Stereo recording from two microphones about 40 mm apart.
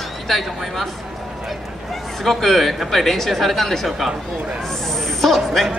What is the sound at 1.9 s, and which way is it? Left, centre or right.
A man's voice, centre.